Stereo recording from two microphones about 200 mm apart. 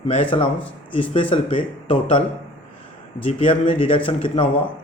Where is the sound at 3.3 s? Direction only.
30° left (ahead or behind).